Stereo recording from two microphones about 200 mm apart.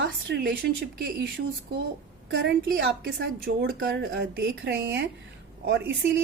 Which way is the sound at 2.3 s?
55° right (ahead or behind).